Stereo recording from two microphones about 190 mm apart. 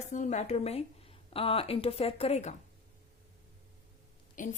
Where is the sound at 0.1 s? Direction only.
40° left (ahead or behind).